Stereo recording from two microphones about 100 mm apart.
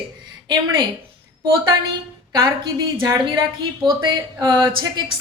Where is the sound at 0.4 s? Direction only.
45° right (ahead or behind).